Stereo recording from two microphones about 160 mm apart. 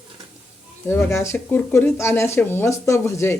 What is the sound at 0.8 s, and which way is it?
Speech, 15° left (ahead or behind).